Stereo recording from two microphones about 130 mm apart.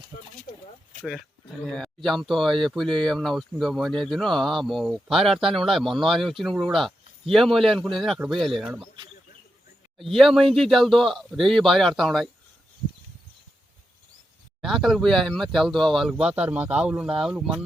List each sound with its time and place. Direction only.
0.5 s a sound: 60° left (ahead or behind)
2.0 s speech: centre (ahead or behind)
10.0 s speech: centre (ahead or behind)
14.6 s speech: centre (ahead or behind)